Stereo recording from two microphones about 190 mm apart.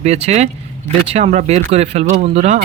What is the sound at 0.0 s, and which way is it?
Speech, 35° right (ahead or behind).